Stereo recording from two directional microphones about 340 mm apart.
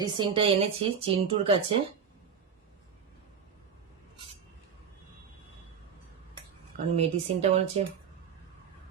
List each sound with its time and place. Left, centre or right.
0.0 s speech: centre
6.9 s speech: centre